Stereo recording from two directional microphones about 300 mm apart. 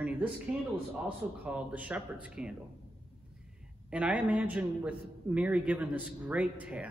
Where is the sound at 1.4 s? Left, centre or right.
Centre.